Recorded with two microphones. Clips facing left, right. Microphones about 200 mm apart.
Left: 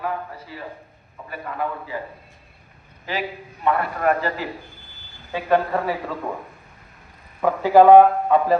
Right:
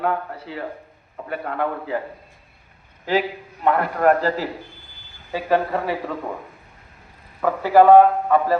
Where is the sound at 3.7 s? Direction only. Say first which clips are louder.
Right 6 dB; 50° right (ahead or behind).